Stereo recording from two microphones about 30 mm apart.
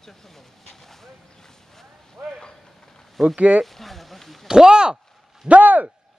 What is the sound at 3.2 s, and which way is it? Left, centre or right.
Speech, centre.